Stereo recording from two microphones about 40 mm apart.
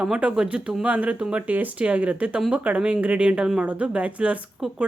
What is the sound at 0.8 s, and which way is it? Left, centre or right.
Speech, right.